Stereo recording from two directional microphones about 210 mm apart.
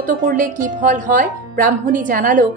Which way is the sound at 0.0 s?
40° right (ahead or behind).